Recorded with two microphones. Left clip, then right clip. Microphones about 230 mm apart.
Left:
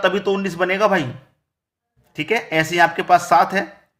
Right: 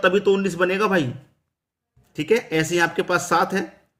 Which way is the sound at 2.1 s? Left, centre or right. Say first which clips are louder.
Left 1 dB; centre.